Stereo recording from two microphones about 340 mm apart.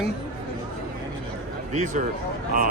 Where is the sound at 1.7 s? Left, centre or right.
Right.